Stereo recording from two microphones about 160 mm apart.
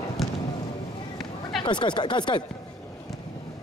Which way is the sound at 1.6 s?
30° left (ahead or behind).